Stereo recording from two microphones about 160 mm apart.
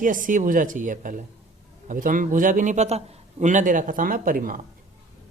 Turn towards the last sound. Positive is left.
turn(degrees=-60)  # may be behind; listen again after turning